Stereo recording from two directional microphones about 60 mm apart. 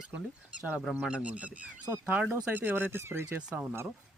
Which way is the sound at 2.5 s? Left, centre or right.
Right.